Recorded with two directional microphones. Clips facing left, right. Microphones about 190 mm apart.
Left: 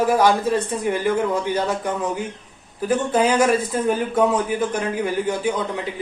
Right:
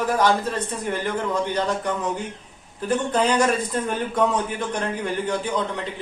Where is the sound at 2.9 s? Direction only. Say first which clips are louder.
Left 2 dB; 10° left (ahead or behind).